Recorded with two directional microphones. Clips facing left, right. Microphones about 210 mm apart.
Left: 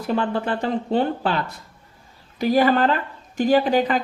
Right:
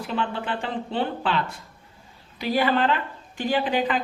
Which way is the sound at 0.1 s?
45° left (ahead or behind).